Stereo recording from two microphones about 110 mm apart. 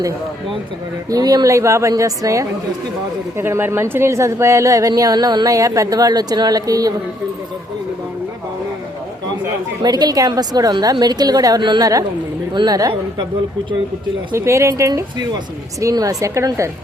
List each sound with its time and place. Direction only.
1.1 s a woman's voice: 35° right (ahead or behind)
9.8 s a woman's voice: 35° right (ahead or behind)
14.3 s speech: 25° right (ahead or behind)